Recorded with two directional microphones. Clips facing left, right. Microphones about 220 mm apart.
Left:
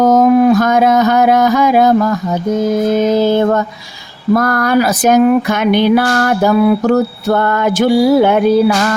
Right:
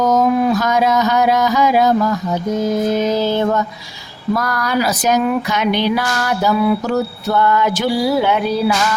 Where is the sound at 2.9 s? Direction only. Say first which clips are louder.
Left 5 dB; 50° left (ahead or behind).